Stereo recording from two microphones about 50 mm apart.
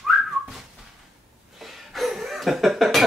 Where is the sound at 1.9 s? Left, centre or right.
Centre.